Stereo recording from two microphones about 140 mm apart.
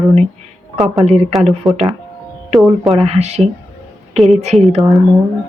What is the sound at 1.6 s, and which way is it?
Speech, centre (ahead or behind).